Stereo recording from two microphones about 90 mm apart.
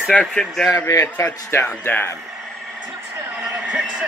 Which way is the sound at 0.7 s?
30° left (ahead or behind).